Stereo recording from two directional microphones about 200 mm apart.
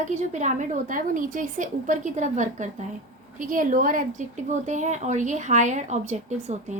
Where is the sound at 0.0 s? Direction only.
35° right (ahead or behind).